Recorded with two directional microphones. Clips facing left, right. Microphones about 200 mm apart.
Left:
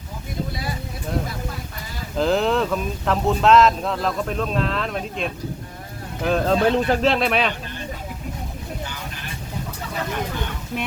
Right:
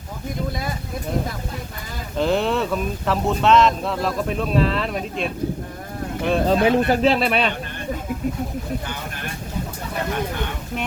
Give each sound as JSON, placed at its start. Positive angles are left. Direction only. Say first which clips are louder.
{"t": 2.1, "sound": "speech", "louder": "left 1 dB", "side_deg": 0}